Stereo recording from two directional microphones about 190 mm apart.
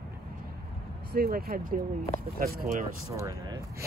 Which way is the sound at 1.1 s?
50° right (ahead or behind).